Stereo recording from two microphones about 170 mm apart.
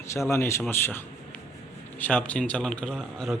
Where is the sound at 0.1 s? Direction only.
15° left (ahead or behind).